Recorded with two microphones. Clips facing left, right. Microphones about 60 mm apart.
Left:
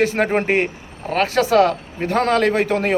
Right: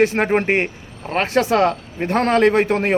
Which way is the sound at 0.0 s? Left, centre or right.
Right.